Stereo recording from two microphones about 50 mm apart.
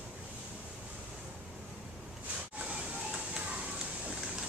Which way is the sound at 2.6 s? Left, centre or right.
Right.